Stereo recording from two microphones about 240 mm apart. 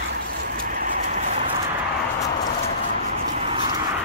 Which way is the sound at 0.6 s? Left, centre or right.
Right.